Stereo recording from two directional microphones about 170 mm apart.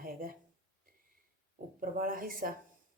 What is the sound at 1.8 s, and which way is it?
Speech, 55° right (ahead or behind).